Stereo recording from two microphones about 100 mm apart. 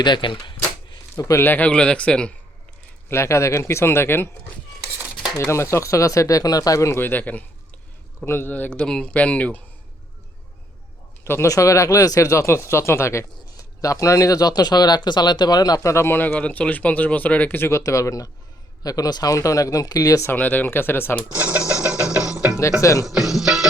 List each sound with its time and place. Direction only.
0.0 s speech: 50° left (ahead or behind)
1.2 s speech: 30° left (ahead or behind)
1.5 s speech: 15° left (ahead or behind)
3.1 s speech: 25° left (ahead or behind)
5.4 s speech: 30° left (ahead or behind)
11.2 s speech: 25° left (ahead or behind)
20.3 s speech: 15° left (ahead or behind)
21.3 s a sound: 15° right (ahead or behind)
22.3 s music: 10° right (ahead or behind)
22.8 s speech: 30° left (ahead or behind)
23.0 s music: 5° right (ahead or behind)